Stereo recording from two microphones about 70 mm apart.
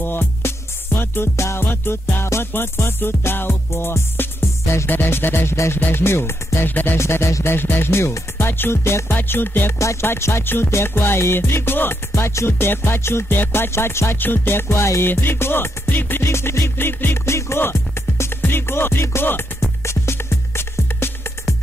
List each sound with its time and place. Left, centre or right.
0.0 s music: left
9.8 s music: left